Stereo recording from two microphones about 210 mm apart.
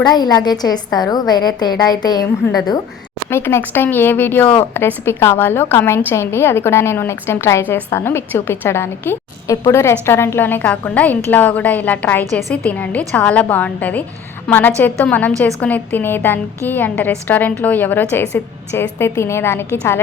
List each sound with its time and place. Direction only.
0.0 s a woman's voice: 20° left (ahead or behind)